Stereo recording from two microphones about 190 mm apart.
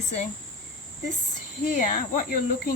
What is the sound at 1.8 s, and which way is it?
Speech, 45° left (ahead or behind).